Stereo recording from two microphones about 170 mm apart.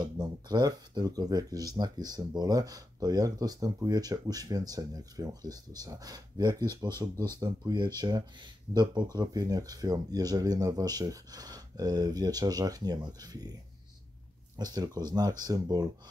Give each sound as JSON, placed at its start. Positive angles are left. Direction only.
{"t": 0.0, "sound": "speech", "side_deg": -25}
{"t": 14.6, "sound": "speech", "side_deg": -25}